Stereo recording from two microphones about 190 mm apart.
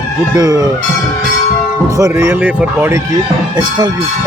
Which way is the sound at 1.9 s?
15° right (ahead or behind).